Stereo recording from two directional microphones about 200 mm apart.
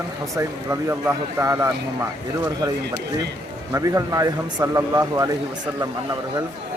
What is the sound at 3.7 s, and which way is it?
Speech, 15° right (ahead or behind).